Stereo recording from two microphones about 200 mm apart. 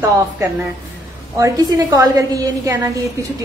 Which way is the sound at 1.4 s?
15° right (ahead or behind).